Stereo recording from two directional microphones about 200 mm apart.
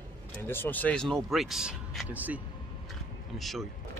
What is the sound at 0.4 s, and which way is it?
Speech, 10° left (ahead or behind).